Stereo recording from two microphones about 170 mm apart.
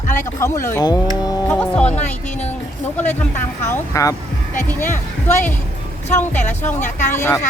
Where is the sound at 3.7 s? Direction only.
20° left (ahead or behind).